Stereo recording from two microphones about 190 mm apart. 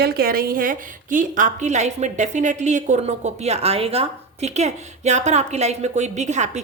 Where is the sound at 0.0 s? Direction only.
50° right (ahead or behind).